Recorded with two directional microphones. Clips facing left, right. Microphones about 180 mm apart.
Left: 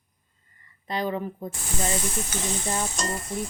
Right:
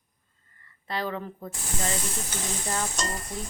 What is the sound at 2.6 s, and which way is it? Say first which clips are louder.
Stir: even; 20° left (ahead or behind).